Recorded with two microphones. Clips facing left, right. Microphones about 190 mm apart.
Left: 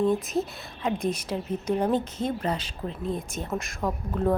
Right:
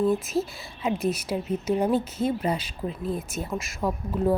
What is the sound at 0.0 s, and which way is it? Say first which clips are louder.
Speech: right 1 dB; 5° right (ahead or behind).